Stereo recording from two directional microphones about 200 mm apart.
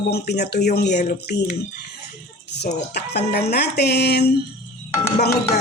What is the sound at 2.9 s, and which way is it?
Speech, 55° left (ahead or behind).